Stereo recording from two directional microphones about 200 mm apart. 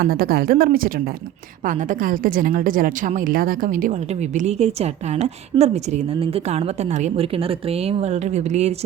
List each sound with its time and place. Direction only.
0.0 s a woman's voice: 50° right (ahead or behind)